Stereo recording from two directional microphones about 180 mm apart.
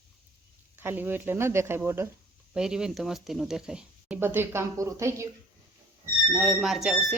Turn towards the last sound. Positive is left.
turn(degrees=0)  # may be behind; listen again after turning